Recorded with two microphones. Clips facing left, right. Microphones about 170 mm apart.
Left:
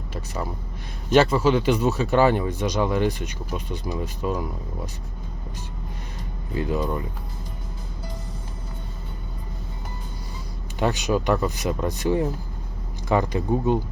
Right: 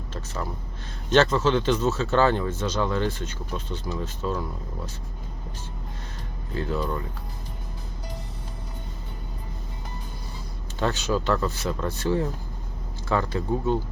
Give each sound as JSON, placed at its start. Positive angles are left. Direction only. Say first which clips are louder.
{"t": 1.1, "sound": "speech", "louder": "left 2 dB", "side_deg": 10}
{"t": 6.5, "sound": "speech", "louder": "left 3 dB", "side_deg": 15}
{"t": 10.8, "sound": "speech", "louder": "left 3 dB", "side_deg": 15}